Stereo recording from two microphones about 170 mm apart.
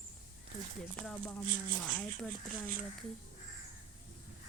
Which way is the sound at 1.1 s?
10° left (ahead or behind).